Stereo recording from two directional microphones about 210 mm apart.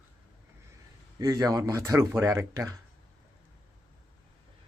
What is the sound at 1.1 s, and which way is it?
Speech, 20° right (ahead or behind).